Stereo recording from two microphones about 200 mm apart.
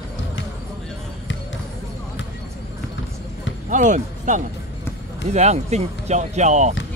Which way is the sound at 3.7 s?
40° right (ahead or behind).